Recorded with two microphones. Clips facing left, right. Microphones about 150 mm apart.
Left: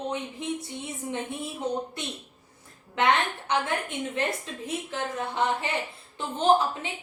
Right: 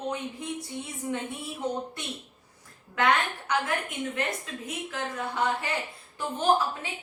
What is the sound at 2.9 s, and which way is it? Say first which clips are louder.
A woman's voice: left 1 dB; 25° left (ahead or behind).